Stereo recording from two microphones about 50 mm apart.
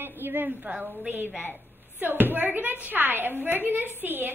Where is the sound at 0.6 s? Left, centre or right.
Right.